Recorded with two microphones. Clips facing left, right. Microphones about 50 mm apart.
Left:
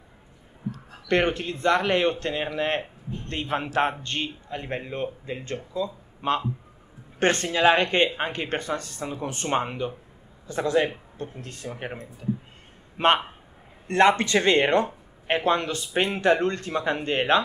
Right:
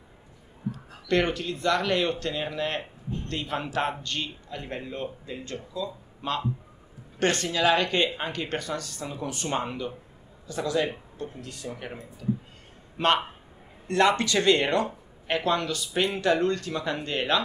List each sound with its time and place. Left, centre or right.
1.0 s a man's voice: left